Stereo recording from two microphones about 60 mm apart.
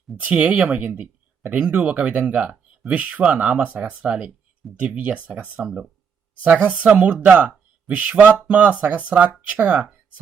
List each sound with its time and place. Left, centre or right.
0.2 s speech: right
0.8 s speech: right